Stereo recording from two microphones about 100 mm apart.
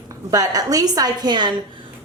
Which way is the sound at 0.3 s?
35° right (ahead or behind).